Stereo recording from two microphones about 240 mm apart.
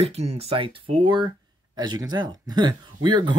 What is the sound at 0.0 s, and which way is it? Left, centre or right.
Speech, right.